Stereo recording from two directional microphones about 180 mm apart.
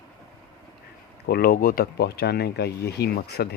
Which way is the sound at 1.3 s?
55° left (ahead or behind).